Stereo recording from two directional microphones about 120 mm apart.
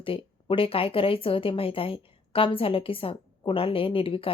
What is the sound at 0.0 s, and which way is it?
A woman's voice, 50° left (ahead or behind).